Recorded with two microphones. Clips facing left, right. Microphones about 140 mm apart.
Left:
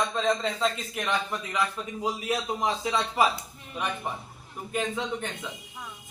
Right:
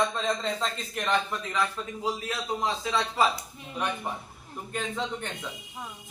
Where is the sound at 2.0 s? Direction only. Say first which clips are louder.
Left 3 dB; 20° left (ahead or behind).